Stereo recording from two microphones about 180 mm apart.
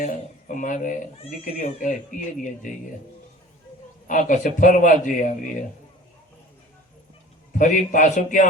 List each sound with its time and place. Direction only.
0.0 s a man's voice: 45° left (ahead or behind)
4.0 s a man's voice: 45° left (ahead or behind)
7.5 s a man's voice: 45° left (ahead or behind)